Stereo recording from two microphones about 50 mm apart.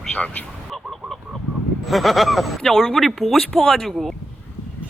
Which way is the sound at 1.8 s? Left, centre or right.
Centre.